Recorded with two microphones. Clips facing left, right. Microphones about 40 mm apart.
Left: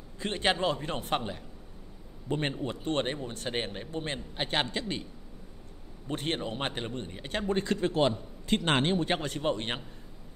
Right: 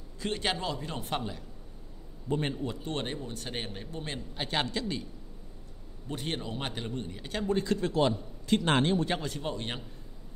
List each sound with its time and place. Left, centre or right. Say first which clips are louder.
0.2 s speech: left 3 dB; left
6.1 s speech: left 3 dB; left